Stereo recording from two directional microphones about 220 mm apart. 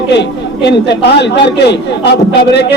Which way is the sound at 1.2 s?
50° left (ahead or behind).